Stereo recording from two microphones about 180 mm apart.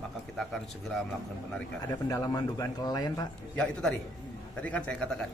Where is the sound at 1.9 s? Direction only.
20° left (ahead or behind).